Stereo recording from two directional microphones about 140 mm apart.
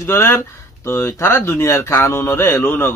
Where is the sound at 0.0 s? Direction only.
20° left (ahead or behind).